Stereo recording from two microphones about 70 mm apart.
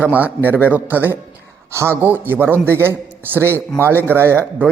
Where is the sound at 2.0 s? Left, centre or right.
Right.